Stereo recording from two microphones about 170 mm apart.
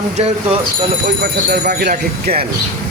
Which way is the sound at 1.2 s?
65° right (ahead or behind).